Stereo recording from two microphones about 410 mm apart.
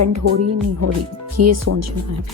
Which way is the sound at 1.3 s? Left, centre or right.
Right.